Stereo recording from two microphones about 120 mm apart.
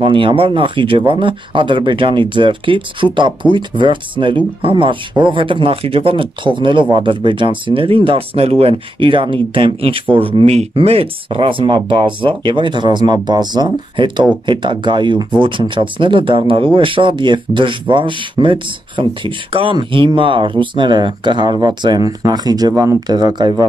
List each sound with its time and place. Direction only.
0.0 s speech: 45° right (ahead or behind)